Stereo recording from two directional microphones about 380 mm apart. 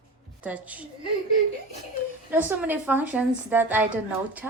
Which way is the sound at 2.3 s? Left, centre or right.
Centre.